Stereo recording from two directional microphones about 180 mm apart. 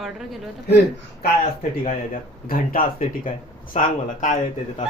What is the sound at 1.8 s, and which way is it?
Speech, 50° left (ahead or behind).